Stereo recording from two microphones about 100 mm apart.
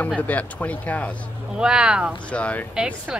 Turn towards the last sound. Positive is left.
turn(degrees=-10)  # may be behind; listen again after turning